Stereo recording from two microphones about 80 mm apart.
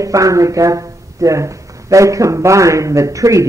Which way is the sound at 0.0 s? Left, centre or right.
Right.